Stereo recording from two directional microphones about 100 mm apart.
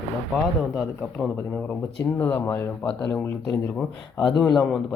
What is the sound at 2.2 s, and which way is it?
Speech, 15° left (ahead or behind).